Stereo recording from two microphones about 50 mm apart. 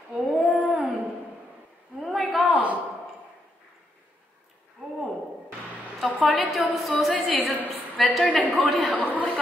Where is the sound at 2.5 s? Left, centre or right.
Right.